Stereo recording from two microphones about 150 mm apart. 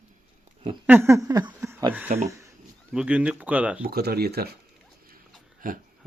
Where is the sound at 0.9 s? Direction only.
15° right (ahead or behind).